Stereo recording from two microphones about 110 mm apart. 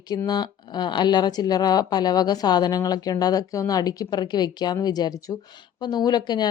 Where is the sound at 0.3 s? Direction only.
40° left (ahead or behind).